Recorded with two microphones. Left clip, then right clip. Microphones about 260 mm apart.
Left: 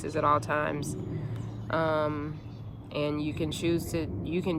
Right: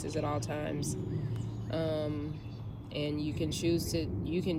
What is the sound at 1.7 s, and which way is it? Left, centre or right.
Speech, centre.